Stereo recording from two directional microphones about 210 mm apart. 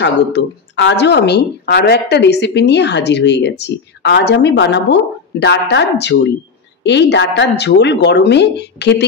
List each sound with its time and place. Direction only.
0.0 s a woman's voice: 55° left (ahead or behind)